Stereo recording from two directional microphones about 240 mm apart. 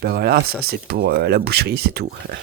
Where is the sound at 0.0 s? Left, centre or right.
Right.